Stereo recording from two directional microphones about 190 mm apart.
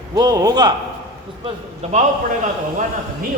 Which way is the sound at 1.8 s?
35° right (ahead or behind).